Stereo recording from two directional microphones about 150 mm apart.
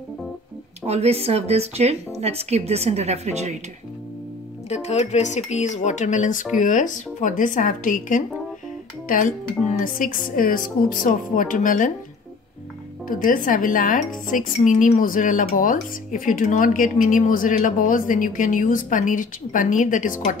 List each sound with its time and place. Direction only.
0.8 s speech: 45° right (ahead or behind)
4.6 s a woman's voice: 45° left (ahead or behind)
13.1 s a woman's voice: 65° left (ahead or behind)